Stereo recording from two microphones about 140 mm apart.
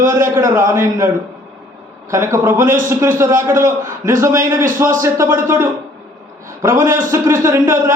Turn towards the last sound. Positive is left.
turn(degrees=-20)  # may be behind; listen again after turning